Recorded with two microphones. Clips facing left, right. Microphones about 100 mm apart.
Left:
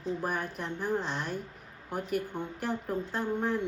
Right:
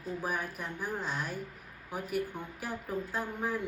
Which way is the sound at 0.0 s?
5° right (ahead or behind).